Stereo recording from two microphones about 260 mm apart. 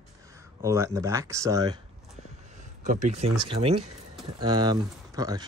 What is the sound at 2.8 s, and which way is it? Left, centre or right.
Speech, right.